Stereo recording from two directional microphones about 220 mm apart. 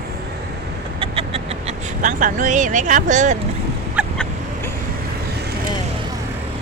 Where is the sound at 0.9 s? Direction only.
25° right (ahead or behind).